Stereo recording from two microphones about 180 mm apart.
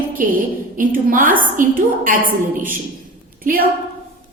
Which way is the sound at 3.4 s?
50° right (ahead or behind).